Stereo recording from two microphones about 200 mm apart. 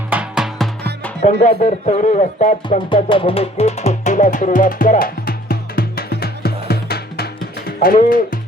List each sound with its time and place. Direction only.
0.1 s music: 5° right (ahead or behind)
1.2 s speech: 40° left (ahead or behind)
2.9 s music: 25° left (ahead or behind); by 7.3 s 50° left (ahead or behind)
7.8 s speech: 45° left (ahead or behind)